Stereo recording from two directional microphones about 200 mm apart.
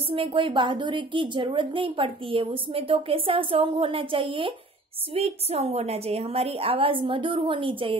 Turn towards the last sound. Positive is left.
turn(degrees=-25)  # may be behind; listen again after turning